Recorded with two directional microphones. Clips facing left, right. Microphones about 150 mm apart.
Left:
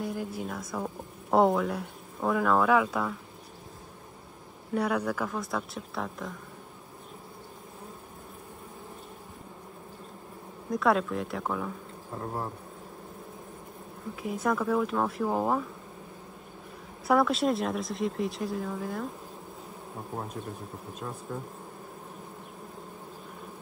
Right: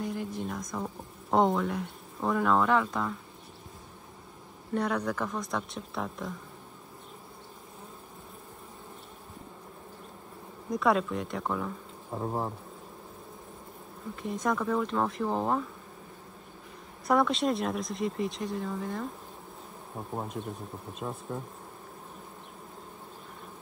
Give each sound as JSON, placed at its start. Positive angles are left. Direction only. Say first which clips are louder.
{"t": 0.0, "sound": "speech", "louder": "even", "side_deg": 0}
{"t": 4.7, "sound": "speech", "louder": "left 1 dB", "side_deg": 5}
{"t": 10.7, "sound": "speech", "louder": "left 1 dB", "side_deg": 0}
{"t": 14.1, "sound": "speech", "louder": "left 1 dB", "side_deg": 5}
{"t": 17.1, "sound": "speech", "louder": "left 1 dB", "side_deg": 0}
{"t": 20.4, "sound": "speech", "louder": "right 1 dB", "side_deg": 0}